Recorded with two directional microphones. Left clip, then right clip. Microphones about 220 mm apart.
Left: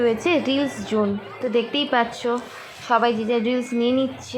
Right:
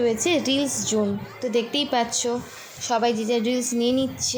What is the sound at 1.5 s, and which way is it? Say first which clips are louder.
A woman's voice: left 2 dB; 5° right (ahead or behind).